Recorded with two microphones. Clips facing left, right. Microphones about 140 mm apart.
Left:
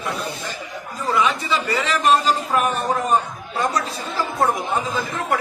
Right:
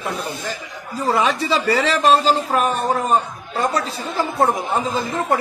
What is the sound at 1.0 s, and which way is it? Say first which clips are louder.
A man's voice: right 2 dB; 35° right (ahead or behind).